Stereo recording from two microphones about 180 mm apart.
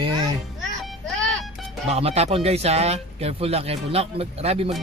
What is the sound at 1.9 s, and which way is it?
Speech, 35° right (ahead or behind).